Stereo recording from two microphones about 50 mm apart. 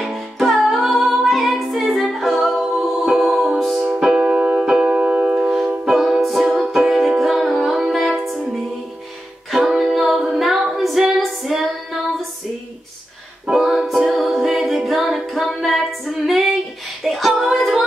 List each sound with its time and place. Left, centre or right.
0.0 s music: centre
3.8 s keyboard: centre
4.9 s music: right
5.3 s music: centre
9.5 s music: centre
13.5 s music: centre
17.0 s female singing: centre